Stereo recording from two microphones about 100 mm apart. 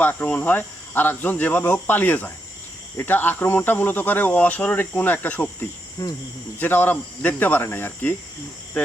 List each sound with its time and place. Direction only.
0.0 s speech: 15° left (ahead or behind)